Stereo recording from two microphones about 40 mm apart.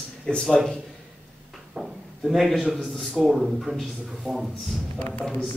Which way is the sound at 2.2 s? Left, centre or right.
Centre.